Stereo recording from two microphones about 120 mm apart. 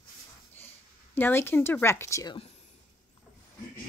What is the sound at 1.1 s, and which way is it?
A woman's voice, 15° left (ahead or behind).